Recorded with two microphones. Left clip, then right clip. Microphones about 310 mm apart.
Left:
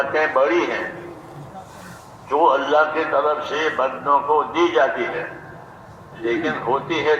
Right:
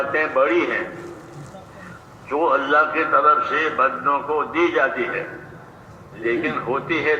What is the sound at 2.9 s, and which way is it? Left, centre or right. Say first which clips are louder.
A man's voice: right 3 dB; left.